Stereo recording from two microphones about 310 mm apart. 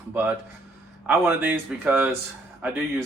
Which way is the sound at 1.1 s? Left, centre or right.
Centre.